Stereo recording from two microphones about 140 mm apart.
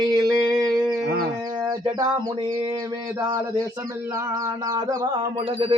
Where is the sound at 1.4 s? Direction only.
25° right (ahead or behind).